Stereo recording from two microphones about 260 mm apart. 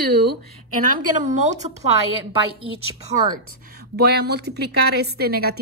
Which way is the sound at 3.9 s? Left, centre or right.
Right.